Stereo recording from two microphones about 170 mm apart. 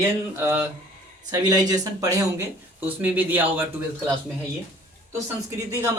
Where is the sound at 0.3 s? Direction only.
10° right (ahead or behind).